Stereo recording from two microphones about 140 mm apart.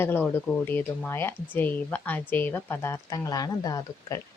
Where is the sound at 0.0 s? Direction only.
15° left (ahead or behind).